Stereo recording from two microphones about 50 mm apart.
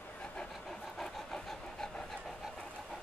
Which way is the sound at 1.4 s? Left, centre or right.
Centre.